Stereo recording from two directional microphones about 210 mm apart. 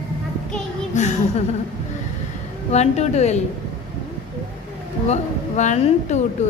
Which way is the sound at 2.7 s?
30° left (ahead or behind).